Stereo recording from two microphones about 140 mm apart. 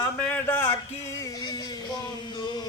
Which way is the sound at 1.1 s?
25° left (ahead or behind).